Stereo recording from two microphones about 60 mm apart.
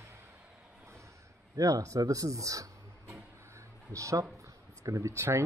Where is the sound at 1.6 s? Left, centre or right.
Right.